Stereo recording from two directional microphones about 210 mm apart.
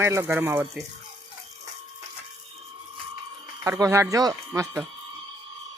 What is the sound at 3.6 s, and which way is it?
Speech, 15° right (ahead or behind).